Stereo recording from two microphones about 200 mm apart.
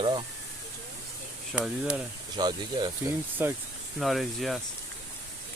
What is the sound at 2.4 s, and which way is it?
Speech, 20° right (ahead or behind).